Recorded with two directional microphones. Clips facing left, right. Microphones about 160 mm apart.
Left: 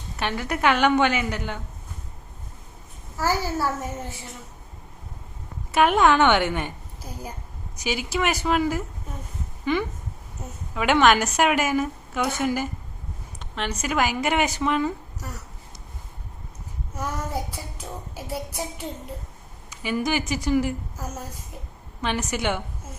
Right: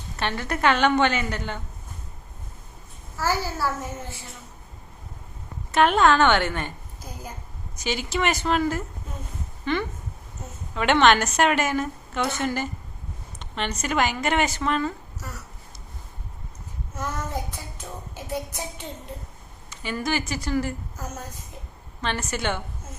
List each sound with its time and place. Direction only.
0.2 s a woman's voice: 10° left (ahead or behind)
3.2 s a woman's voice: 15° left (ahead or behind)
5.7 s a woman's voice: 10° left (ahead or behind)
17.0 s a woman's voice: 10° left (ahead or behind)
17.7 s a sound: 10° left (ahead or behind)
19.7 s a woman's voice: 10° left (ahead or behind)